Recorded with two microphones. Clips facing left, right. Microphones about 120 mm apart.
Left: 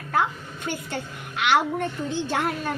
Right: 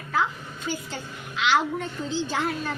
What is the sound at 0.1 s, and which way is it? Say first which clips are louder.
A woman's voice: left 2 dB; 55° left (ahead or behind).